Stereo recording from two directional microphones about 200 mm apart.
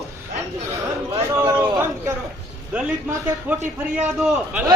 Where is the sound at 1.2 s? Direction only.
10° right (ahead or behind).